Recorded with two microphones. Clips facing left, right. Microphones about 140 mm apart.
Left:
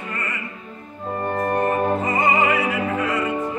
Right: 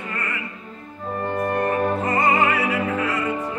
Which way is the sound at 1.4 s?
35° left (ahead or behind).